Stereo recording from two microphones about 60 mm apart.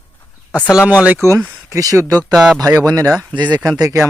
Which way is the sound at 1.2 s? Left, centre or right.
Right.